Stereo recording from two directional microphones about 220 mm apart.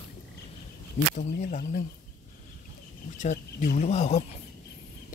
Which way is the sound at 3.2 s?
35° left (ahead or behind).